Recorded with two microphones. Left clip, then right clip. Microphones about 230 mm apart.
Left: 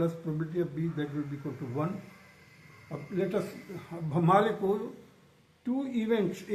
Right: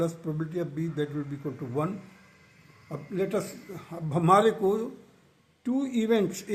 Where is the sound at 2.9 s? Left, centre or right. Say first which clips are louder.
Right 2 dB; right.